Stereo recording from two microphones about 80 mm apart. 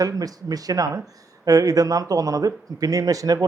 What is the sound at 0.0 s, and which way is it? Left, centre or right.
Speech, right.